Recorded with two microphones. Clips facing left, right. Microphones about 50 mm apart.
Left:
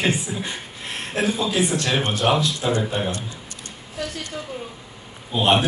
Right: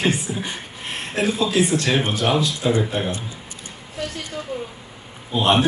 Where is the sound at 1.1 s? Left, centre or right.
Right.